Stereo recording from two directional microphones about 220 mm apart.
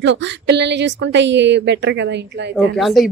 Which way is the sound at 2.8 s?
Centre (ahead or behind).